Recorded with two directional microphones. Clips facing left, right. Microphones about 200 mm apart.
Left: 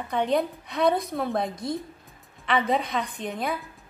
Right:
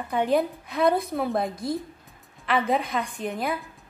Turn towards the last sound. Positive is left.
turn(degrees=0)  # may be behind; listen again after turning